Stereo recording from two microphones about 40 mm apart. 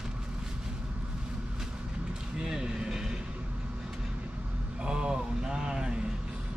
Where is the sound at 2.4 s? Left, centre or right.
Centre.